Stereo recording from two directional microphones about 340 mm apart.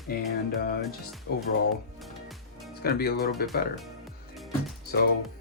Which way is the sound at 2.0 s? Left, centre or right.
Centre.